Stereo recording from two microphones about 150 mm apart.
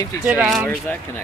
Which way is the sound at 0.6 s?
10° left (ahead or behind).